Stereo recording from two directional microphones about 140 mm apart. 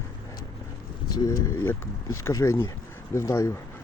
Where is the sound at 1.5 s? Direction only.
15° left (ahead or behind).